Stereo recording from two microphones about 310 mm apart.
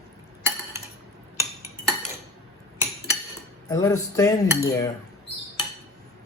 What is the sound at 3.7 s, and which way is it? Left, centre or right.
Cutlery, centre.